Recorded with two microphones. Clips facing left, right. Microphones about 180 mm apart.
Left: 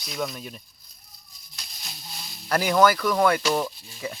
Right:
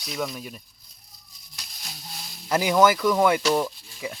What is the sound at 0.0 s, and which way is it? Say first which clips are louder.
Speech: even; 5° right (ahead or behind).